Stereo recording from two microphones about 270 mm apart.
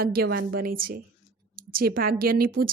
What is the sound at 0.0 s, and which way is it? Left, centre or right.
A woman's voice, right.